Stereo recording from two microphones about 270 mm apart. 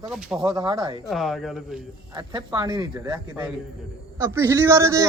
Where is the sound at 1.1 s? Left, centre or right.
Centre.